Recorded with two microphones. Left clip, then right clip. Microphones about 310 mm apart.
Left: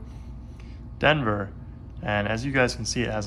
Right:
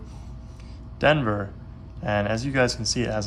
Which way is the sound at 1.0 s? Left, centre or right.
Centre.